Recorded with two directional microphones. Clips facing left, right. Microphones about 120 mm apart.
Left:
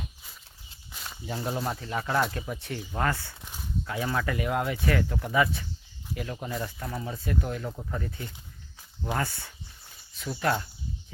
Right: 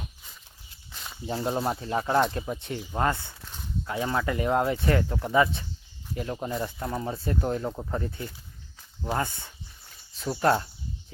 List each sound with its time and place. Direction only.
0.9 s snake: centre (ahead or behind)
1.5 s speech: 25° right (ahead or behind)
10.2 s speech: 30° right (ahead or behind)